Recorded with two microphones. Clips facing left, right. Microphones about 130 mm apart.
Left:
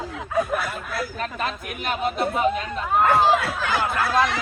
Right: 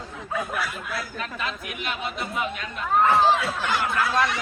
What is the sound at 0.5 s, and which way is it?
Speech, 50° left (ahead or behind).